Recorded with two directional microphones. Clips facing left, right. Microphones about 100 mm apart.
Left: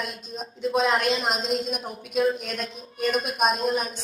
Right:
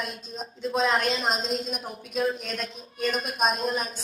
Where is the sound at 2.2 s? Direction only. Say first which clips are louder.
Left 2 dB; 30° right (ahead or behind).